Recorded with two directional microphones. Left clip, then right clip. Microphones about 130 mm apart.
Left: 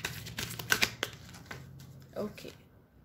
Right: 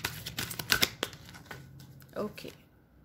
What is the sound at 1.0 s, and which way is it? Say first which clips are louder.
Crumpling: right 1 dB; 45° right (ahead or behind).